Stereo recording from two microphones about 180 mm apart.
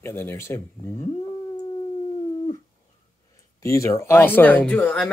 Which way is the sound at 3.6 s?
15° left (ahead or behind).